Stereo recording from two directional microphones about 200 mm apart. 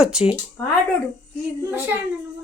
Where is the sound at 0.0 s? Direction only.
5° right (ahead or behind).